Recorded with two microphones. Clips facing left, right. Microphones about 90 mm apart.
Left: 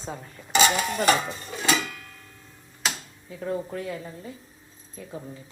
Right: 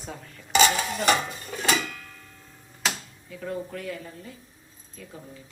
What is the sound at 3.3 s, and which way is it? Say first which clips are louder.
A woman's voice: left 3 dB; 25° left (ahead or behind).